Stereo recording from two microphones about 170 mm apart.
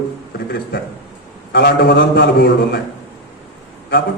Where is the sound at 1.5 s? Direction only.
65° left (ahead or behind).